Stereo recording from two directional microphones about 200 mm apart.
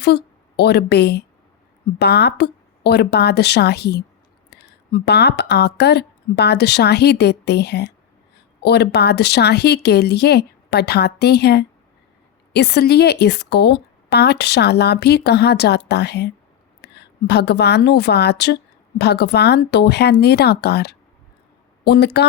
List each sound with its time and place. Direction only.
0.0 s a woman's voice: 55° left (ahead or behind)